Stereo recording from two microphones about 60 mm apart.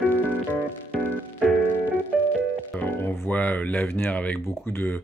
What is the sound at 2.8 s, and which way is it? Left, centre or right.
Music, left.